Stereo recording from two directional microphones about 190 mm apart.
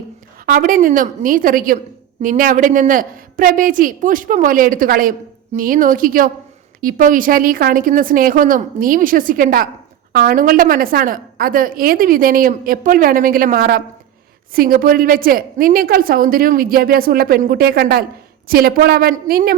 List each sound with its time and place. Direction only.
0.4 s a woman's voice: 45° right (ahead or behind)